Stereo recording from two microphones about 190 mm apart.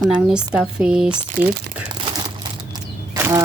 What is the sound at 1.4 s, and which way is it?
Speech, 50° right (ahead or behind).